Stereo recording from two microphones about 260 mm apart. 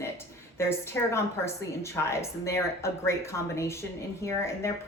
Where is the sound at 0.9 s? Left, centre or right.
Centre.